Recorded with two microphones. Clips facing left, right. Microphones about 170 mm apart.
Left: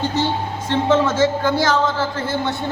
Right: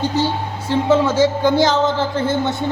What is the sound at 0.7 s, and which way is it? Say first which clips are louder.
Speech: right 2 dB; 10° right (ahead or behind).